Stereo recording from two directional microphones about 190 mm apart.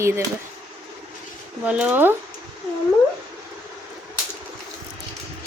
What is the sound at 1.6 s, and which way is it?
Speech, 5° right (ahead or behind).